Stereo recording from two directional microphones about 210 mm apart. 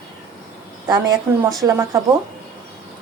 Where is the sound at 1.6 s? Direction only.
15° right (ahead or behind).